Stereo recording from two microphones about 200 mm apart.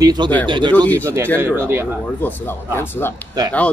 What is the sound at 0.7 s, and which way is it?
Speech, 10° left (ahead or behind).